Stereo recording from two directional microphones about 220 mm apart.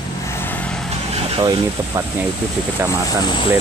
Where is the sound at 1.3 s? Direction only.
15° right (ahead or behind).